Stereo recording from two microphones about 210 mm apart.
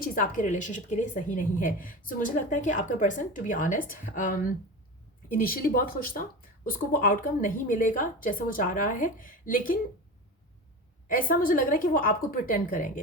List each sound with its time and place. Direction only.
0.0 s a woman's voice: 40° left (ahead or behind)
11.1 s a woman's voice: 40° left (ahead or behind)